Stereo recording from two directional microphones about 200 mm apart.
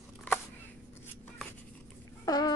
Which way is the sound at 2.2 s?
20° left (ahead or behind).